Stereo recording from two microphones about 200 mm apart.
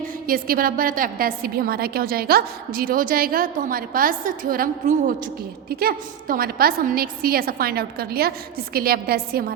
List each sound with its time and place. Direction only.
0.3 s a woman's voice: 45° right (ahead or behind)